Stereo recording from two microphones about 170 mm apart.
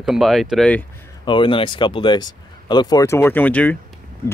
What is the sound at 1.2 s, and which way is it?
Speech, 30° left (ahead or behind).